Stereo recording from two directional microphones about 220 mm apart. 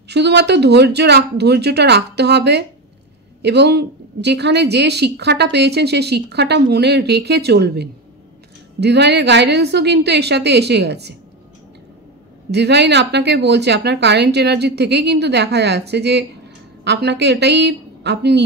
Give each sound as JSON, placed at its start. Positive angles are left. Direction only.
{"t": 0.1, "sound": "a woman's voice", "side_deg": -50}
{"t": 12.4, "sound": "a woman's voice", "side_deg": -50}